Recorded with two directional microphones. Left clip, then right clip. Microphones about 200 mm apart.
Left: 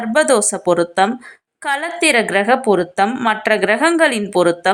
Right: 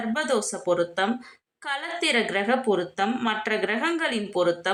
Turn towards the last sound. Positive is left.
turn(degrees=40)  # may be behind; listen again after turning